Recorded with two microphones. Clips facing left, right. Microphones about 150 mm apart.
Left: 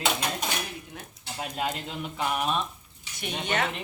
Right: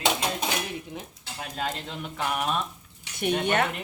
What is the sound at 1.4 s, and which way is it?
Speech, 15° left (ahead or behind).